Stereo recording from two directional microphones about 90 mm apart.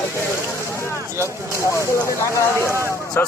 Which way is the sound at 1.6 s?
35° left (ahead or behind).